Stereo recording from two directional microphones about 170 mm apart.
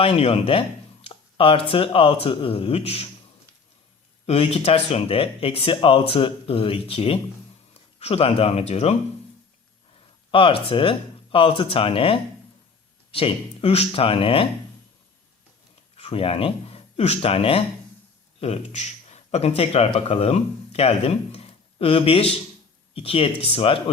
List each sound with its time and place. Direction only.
0.0 s speech: 35° left (ahead or behind)
1.0 s a sound: 35° left (ahead or behind)
1.7 s speech: 35° left (ahead or behind)
4.3 s speech: 35° left (ahead or behind)
10.3 s speech: 30° left (ahead or behind)
16.0 s speech: 35° left (ahead or behind)